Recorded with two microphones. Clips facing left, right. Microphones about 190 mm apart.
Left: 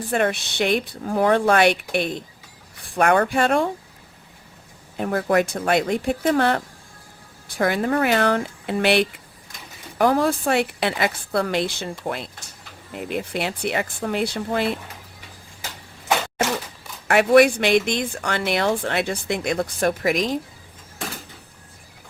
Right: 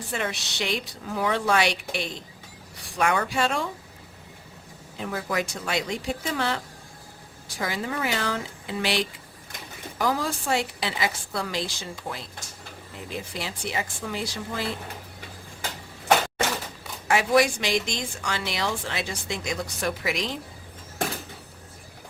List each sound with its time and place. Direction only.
0.1 s speech: 55° left (ahead or behind)
4.9 s speech: 55° left (ahead or behind)
17.1 s speech: 65° left (ahead or behind); by 20.4 s 45° left (ahead or behind)